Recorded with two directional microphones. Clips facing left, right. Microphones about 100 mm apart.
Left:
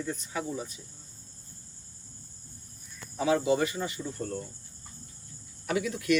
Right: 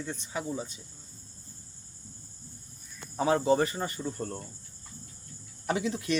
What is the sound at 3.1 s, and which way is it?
Speech, 35° right (ahead or behind).